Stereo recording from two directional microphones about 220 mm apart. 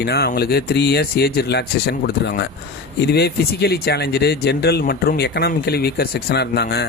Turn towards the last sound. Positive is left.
turn(degrees=50)  # may be behind; listen again after turning